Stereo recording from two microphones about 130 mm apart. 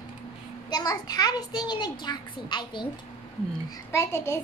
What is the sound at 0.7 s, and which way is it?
A child's voice, 30° left (ahead or behind).